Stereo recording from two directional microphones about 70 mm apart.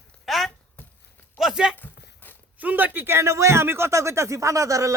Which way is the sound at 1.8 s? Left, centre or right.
Left.